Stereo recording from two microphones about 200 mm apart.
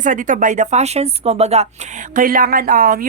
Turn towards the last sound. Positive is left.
turn(degrees=-45)  # may be behind; listen again after turning